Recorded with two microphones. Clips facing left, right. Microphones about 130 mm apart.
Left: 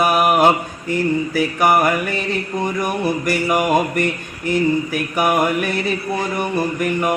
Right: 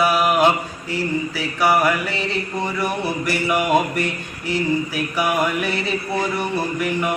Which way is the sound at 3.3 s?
45° left (ahead or behind).